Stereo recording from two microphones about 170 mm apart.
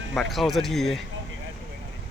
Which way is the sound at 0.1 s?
Centre (ahead or behind).